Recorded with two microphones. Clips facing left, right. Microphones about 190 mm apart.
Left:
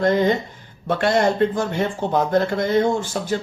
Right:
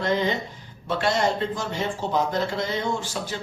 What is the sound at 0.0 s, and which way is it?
Speech, 50° left (ahead or behind).